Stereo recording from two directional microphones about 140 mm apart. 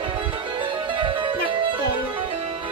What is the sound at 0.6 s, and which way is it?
Music, 35° right (ahead or behind).